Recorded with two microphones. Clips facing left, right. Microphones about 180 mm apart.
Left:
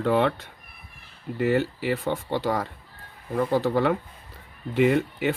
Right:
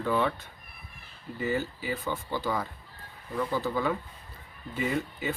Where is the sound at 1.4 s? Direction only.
70° left (ahead or behind).